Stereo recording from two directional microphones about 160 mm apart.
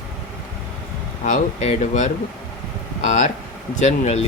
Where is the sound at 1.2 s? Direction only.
50° left (ahead or behind).